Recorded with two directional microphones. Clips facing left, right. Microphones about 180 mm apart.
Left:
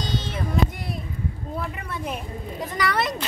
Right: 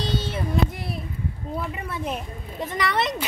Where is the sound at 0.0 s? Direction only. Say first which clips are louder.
Right 2 dB; 30° right (ahead or behind).